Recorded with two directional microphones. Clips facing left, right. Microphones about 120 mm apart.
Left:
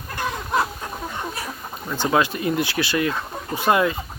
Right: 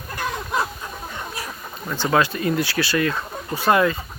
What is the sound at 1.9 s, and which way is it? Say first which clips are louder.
Speech: even; 15° left (ahead or behind).